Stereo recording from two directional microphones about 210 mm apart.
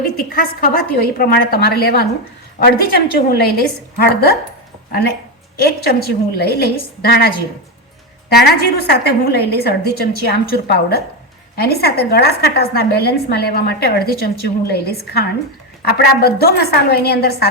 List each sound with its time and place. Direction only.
0.0 s a woman's voice: 45° left (ahead or behind)
5.5 s a woman's voice: 50° left (ahead or behind)
8.4 s a woman's voice: 50° left (ahead or behind)